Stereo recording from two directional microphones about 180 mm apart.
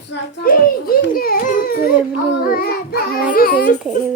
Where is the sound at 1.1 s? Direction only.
55° left (ahead or behind).